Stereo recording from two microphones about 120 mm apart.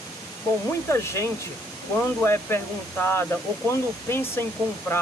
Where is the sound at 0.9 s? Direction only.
25° left (ahead or behind).